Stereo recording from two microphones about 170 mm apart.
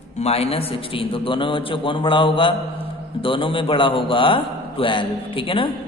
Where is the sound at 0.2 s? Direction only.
35° left (ahead or behind).